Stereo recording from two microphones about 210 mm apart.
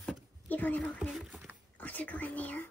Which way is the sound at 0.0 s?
5° left (ahead or behind).